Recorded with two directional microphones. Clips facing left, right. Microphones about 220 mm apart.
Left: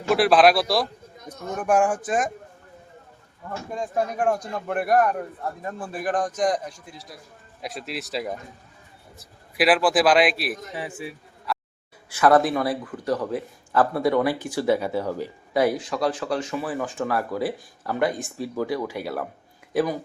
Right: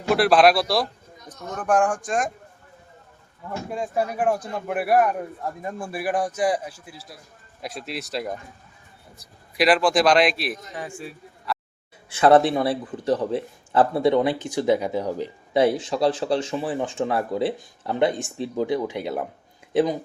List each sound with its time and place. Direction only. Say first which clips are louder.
0.1 s a man's voice: even; centre (ahead or behind)
3.5 s a man's voice: right 1 dB; 10° right (ahead or behind)
12.2 s a man's voice: right 2 dB; 30° right (ahead or behind)